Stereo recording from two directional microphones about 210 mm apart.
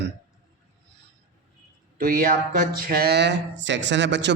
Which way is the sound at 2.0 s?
45° right (ahead or behind).